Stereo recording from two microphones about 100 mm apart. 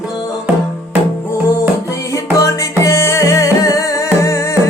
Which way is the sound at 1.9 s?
35° left (ahead or behind).